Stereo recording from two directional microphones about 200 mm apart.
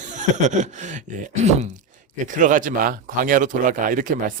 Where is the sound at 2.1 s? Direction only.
40° right (ahead or behind).